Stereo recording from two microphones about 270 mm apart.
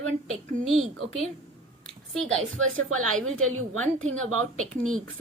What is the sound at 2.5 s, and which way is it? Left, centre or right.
A woman's voice, right.